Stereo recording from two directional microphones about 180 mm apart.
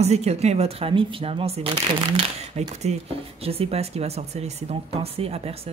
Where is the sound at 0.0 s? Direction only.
35° right (ahead or behind).